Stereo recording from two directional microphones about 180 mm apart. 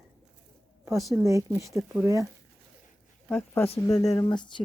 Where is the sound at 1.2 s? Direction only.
15° right (ahead or behind).